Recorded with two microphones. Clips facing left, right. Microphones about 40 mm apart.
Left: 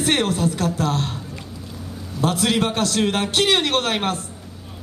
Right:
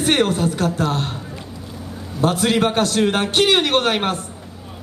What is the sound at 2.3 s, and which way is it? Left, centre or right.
A man's voice, centre.